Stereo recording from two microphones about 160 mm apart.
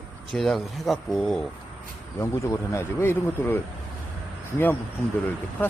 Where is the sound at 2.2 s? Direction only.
20° left (ahead or behind).